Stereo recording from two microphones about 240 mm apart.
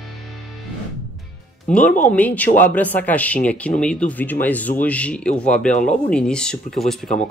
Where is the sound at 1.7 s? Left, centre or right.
Centre.